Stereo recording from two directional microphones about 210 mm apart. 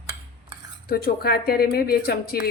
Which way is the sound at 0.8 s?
45° left (ahead or behind).